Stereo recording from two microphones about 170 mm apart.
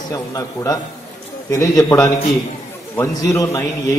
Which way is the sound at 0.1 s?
20° left (ahead or behind).